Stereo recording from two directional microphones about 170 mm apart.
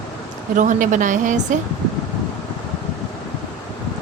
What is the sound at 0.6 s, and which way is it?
Speech, 50° right (ahead or behind).